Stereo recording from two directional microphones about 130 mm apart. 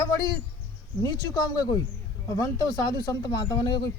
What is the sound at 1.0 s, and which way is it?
Speech, 30° left (ahead or behind).